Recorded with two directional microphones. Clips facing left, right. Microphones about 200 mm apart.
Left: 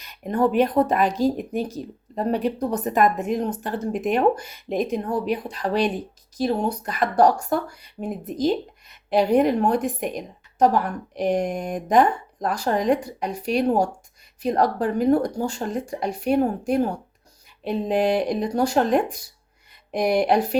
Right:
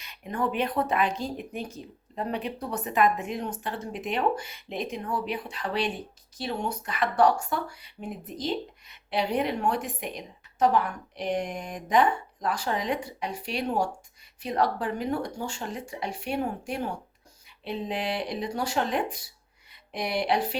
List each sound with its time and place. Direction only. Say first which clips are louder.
0.0 s speech: left 8 dB; 40° left (ahead or behind)